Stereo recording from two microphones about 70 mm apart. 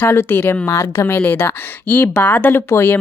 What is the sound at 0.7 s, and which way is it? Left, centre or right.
Speech, left.